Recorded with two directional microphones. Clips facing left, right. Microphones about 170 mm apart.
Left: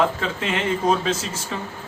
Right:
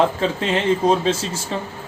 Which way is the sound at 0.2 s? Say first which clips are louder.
Right 4 dB; 30° right (ahead or behind).